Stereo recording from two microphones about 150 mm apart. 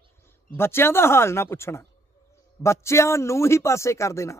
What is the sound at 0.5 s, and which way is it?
A man's voice, 15° left (ahead or behind).